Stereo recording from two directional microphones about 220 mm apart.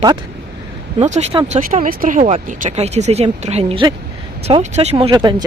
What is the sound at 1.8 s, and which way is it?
Speech, 40° right (ahead or behind).